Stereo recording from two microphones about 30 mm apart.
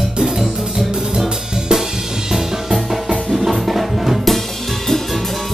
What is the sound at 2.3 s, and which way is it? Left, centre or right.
Music, centre.